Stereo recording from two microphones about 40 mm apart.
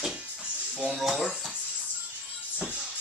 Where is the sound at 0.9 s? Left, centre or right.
Centre.